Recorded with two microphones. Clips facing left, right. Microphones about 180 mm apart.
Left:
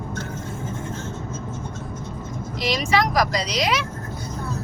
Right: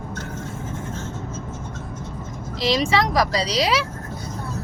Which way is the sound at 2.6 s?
30° right (ahead or behind).